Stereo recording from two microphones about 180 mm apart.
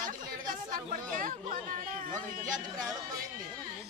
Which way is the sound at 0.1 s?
50° right (ahead or behind).